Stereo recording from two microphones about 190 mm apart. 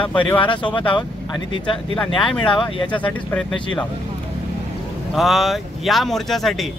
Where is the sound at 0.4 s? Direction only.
25° left (ahead or behind).